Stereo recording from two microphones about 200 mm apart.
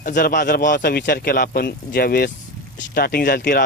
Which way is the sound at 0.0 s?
45° left (ahead or behind).